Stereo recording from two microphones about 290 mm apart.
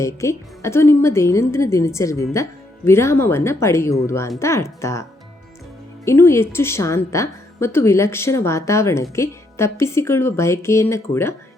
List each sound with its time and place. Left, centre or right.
0.0 s a woman's voice: centre
6.1 s a woman's voice: centre